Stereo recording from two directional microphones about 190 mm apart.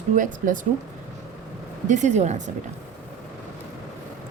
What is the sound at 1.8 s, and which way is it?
Speech, 40° right (ahead or behind).